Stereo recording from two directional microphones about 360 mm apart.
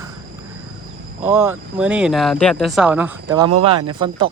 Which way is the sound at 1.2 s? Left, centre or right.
Centre.